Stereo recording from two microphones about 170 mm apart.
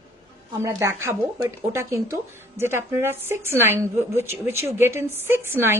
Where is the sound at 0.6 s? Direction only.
15° right (ahead or behind).